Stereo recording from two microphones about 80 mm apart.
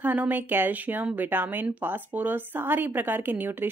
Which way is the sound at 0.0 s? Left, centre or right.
Right.